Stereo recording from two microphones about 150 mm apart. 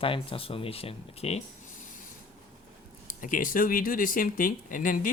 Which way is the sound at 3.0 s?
65° left (ahead or behind).